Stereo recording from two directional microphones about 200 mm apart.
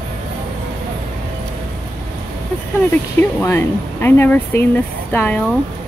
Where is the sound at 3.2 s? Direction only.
10° left (ahead or behind).